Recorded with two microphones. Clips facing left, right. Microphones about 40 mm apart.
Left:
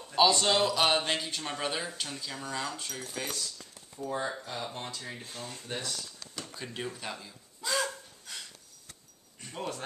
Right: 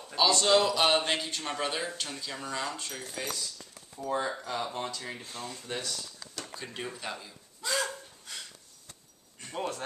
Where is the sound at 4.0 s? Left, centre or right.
Right.